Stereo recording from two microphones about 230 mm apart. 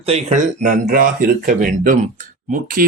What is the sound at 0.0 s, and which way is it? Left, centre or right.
Speech, right.